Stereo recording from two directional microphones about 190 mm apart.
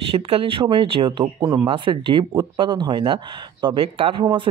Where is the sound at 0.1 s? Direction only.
30° right (ahead or behind).